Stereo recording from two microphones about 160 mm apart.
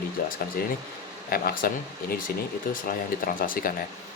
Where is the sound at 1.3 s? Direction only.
70° left (ahead or behind).